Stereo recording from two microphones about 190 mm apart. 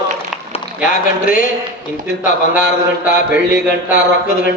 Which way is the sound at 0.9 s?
45° left (ahead or behind).